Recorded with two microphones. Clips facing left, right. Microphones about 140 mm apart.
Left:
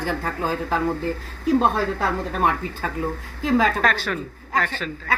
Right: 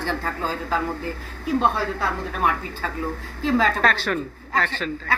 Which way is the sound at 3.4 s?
15° left (ahead or behind).